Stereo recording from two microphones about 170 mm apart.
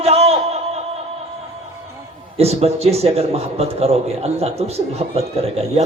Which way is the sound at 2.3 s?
35° right (ahead or behind).